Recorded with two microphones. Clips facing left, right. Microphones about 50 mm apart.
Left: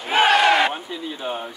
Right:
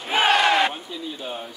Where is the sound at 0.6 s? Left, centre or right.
Left.